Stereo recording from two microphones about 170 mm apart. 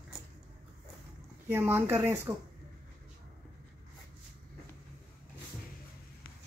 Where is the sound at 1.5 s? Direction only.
15° right (ahead or behind).